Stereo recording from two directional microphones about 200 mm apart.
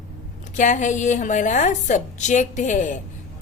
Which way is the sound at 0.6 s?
40° left (ahead or behind).